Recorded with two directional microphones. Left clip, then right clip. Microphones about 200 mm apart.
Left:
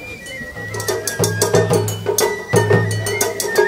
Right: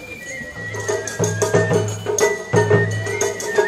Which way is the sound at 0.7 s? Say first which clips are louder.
Left 1 dB; 50° left (ahead or behind).